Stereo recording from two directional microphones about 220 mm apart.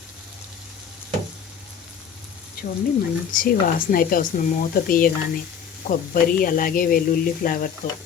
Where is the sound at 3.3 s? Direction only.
40° left (ahead or behind).